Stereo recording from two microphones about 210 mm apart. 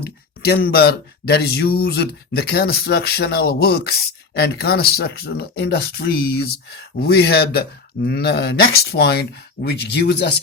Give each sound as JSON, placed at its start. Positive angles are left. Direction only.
{"t": 0.0, "sound": "speech", "side_deg": 50}